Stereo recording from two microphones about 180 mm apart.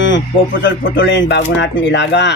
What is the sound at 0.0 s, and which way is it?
Speech, 90° left.